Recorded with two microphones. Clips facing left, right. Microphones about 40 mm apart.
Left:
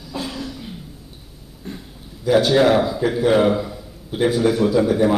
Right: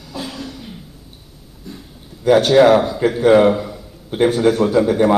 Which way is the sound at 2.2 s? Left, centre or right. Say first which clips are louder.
Right 4 dB; right.